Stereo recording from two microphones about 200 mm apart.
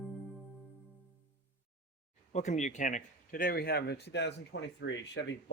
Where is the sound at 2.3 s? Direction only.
35° left (ahead or behind).